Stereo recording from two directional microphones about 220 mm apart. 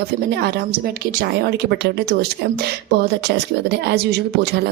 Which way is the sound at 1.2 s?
45° right (ahead or behind).